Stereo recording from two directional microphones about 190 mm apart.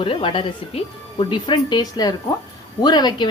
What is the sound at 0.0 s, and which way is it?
A woman's voice, 25° left (ahead or behind).